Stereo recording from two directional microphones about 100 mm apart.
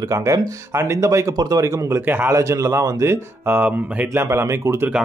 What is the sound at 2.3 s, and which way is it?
Speech, 30° right (ahead or behind).